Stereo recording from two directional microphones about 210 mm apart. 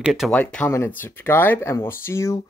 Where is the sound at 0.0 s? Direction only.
Centre (ahead or behind).